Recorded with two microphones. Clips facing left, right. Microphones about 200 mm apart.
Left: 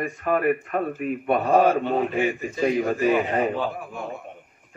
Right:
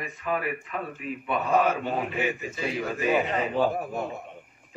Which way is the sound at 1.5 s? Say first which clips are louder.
Left 5 dB; 35° left (ahead or behind).